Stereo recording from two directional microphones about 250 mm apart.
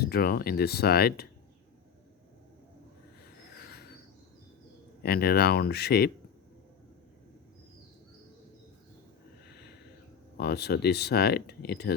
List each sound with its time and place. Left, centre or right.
0.0 s speech: left
3.5 s a sound: left
5.0 s speech: left
10.3 s speech: left